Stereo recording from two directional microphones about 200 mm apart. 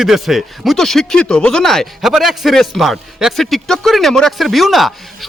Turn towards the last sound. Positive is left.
turn(degrees=0)  # may be behind; listen again after turning